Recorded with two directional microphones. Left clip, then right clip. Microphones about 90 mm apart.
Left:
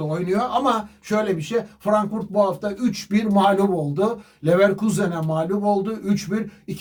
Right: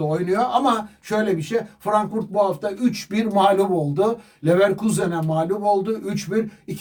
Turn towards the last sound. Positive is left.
turn(degrees=-25)  # may be behind; listen again after turning